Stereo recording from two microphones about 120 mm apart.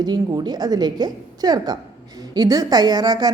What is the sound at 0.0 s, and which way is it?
A woman's voice, 35° right (ahead or behind).